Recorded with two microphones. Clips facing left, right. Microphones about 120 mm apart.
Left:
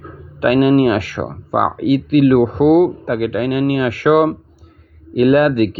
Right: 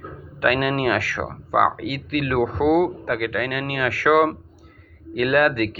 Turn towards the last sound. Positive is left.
turn(degrees=20)  # may be behind; listen again after turning